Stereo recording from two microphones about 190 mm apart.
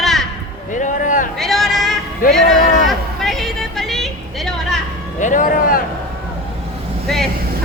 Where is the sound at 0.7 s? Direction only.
40° left (ahead or behind).